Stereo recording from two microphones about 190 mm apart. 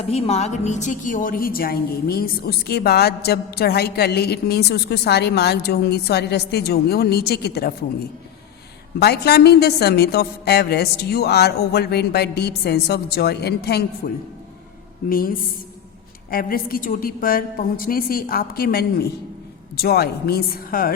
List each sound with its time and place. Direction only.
0.0 s a woman's voice: 30° left (ahead or behind); by 7.7 s 55° left (ahead or behind)
9.0 s a woman's voice: 55° left (ahead or behind)
14.0 s a woman's voice: 45° left (ahead or behind)
16.3 s a woman's voice: 50° left (ahead or behind)